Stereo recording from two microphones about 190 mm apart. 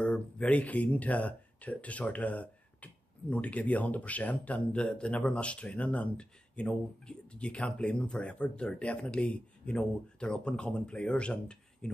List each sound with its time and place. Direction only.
0.0 s speech: 5° left (ahead or behind)